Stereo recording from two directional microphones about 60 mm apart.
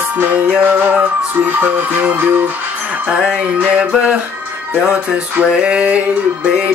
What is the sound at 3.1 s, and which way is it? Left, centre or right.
Music, centre.